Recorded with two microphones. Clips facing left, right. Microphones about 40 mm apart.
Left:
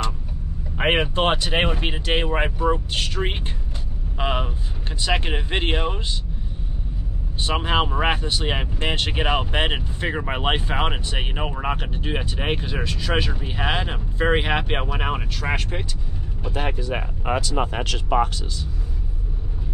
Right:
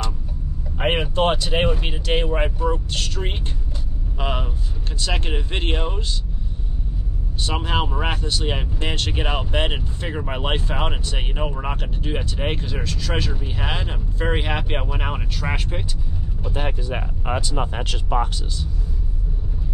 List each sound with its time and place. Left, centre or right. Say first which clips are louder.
0.7 s speech: even; left
7.4 s speech: left 2 dB; left
16.4 s speech: left 1 dB; left
17.6 s speech: left 2 dB; left